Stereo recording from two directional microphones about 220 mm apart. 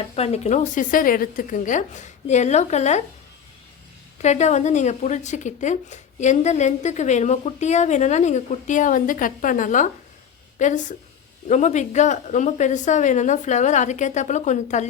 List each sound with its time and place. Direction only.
0.2 s speech: 30° left (ahead or behind)
4.2 s speech: 30° left (ahead or behind)